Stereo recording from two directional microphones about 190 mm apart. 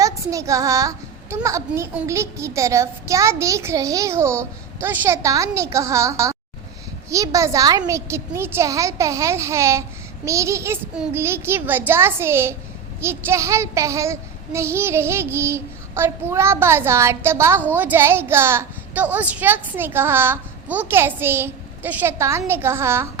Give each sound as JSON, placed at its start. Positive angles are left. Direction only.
{"t": 0.0, "sound": "a child's voice", "side_deg": -15}
{"t": 1.5, "sound": "child singing", "side_deg": -15}